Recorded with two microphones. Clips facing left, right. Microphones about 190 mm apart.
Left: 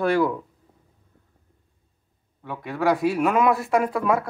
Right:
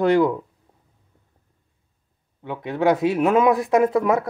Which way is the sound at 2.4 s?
20° right (ahead or behind).